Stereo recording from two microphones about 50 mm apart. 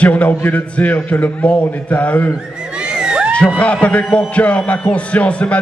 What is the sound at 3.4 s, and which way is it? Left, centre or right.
A man's voice, left.